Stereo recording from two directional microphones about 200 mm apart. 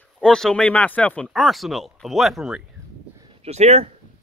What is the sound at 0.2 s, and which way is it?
Speech, 5° left (ahead or behind).